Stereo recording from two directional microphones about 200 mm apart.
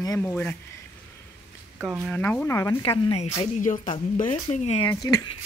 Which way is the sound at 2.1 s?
10° left (ahead or behind).